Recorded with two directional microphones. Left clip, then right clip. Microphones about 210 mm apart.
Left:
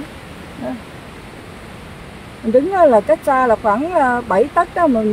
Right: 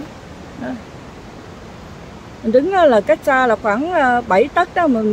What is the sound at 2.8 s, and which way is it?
Speech, centre (ahead or behind).